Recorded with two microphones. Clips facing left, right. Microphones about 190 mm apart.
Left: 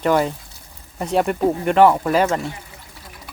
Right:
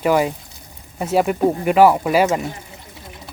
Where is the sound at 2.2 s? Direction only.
20° right (ahead or behind).